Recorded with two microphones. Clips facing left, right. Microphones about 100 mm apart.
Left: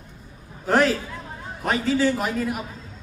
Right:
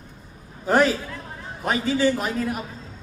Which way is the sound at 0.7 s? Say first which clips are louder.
Right 1 dB; centre (ahead or behind).